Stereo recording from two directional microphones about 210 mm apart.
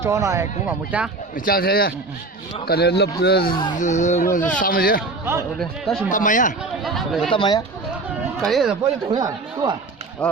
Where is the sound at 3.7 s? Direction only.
35° left (ahead or behind).